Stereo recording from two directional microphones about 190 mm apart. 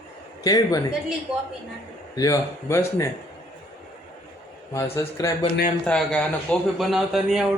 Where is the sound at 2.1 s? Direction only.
15° left (ahead or behind).